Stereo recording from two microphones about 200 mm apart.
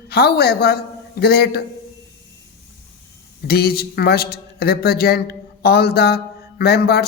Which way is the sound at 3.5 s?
50° left (ahead or behind).